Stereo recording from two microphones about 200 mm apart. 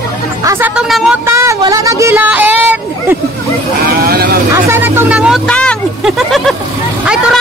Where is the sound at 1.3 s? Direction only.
15° right (ahead or behind).